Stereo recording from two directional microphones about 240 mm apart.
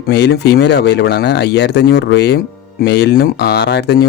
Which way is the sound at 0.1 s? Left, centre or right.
Left.